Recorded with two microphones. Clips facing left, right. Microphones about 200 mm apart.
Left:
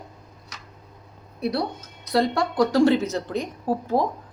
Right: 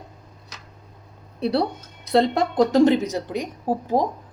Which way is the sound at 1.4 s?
30° right (ahead or behind).